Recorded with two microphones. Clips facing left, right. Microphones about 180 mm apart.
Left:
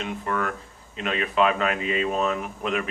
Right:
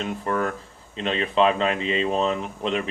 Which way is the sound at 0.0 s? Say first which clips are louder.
Right 3 dB; 35° right (ahead or behind).